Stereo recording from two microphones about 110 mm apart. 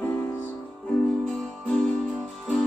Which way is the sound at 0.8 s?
10° left (ahead or behind).